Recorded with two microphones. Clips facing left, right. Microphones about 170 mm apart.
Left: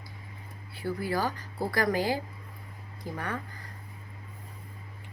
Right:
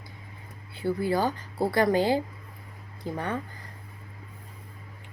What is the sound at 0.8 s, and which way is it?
Speech, 25° right (ahead or behind).